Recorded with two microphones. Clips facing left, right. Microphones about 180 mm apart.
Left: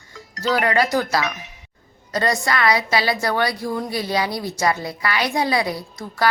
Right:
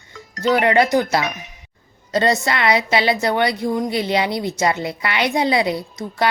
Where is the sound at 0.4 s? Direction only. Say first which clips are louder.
Right 4 dB; 25° right (ahead or behind).